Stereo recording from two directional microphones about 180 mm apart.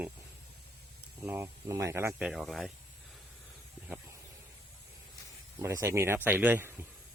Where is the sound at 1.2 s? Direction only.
15° right (ahead or behind).